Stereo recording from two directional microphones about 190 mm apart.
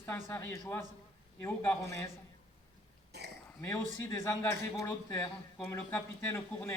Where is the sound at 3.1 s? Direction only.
60° right (ahead or behind).